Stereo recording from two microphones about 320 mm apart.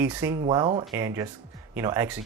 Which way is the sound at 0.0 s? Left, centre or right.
Centre.